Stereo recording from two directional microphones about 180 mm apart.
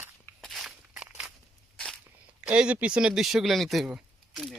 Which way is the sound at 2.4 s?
5° right (ahead or behind).